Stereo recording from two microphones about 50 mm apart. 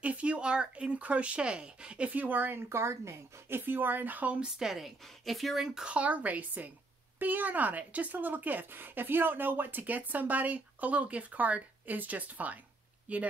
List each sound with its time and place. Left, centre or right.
0.0 s speech: right
2.0 s speech: right
4.4 s a woman's voice: centre
5.9 s speech: right